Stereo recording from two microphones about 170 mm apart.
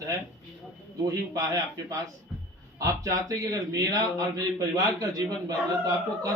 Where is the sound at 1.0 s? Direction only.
20° right (ahead or behind).